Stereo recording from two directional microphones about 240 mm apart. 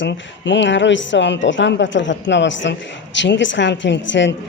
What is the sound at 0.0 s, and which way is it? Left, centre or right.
Speech, left.